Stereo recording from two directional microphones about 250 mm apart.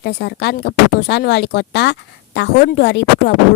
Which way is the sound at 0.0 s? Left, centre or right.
Left.